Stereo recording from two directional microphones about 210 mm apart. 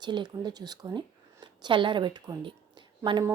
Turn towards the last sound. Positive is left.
turn(degrees=-20)  # may be behind; listen again after turning